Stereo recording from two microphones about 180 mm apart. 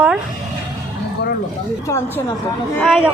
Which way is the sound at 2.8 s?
5° right (ahead or behind).